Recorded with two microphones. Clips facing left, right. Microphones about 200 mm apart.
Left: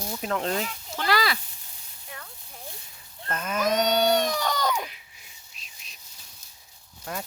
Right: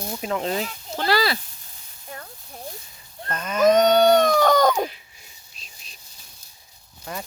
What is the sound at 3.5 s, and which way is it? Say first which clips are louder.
Baby cry: right 8 dB; 50° right (ahead or behind).